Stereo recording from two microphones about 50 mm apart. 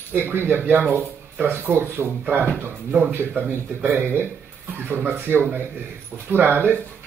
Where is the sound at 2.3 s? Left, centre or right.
Right.